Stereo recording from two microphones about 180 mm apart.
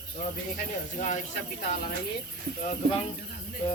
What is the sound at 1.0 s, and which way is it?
Speech, 45° left (ahead or behind).